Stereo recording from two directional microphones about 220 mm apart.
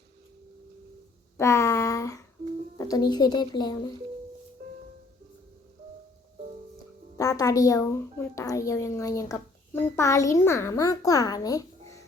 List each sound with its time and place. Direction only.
1.4 s a sound: 10° left (ahead or behind)
2.7 s speech: 15° left (ahead or behind)
7.2 s speech: 15° left (ahead or behind)